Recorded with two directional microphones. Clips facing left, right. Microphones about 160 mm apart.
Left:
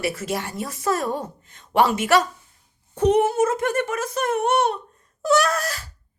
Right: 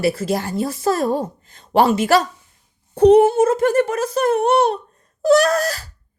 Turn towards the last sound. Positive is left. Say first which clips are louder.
# right 6 dB
turn(degrees=-40)  # may be behind; listen again after turning